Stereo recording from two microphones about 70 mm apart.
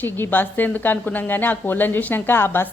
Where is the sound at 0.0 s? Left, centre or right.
Left.